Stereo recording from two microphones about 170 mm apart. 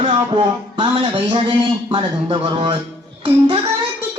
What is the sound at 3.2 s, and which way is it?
Music, 35° right (ahead or behind).